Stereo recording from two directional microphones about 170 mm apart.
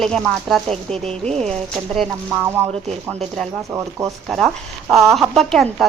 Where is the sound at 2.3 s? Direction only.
15° right (ahead or behind).